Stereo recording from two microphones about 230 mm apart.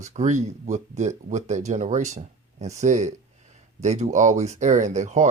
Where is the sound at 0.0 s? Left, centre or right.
Right.